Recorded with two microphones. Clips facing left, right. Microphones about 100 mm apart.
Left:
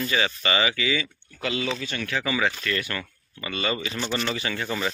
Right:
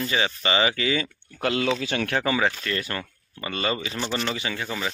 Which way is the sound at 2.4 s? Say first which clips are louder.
Right 1 dB; 25° right (ahead or behind).